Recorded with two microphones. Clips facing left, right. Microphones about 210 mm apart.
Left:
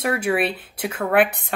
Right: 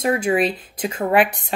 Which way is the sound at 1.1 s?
55° left (ahead or behind).